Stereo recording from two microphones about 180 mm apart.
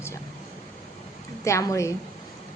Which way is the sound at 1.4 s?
15° left (ahead or behind).